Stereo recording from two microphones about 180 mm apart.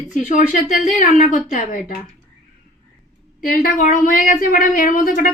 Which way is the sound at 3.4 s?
50° left (ahead or behind).